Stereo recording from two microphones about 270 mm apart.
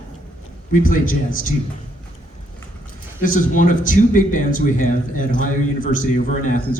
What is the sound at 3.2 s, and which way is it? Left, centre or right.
Speech, left.